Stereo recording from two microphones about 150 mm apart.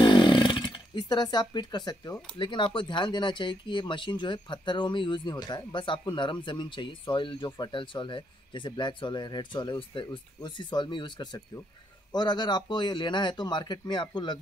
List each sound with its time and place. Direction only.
0.0 s chainsaw: 30° left (ahead or behind)
2.3 s a man's voice: 30° left (ahead or behind)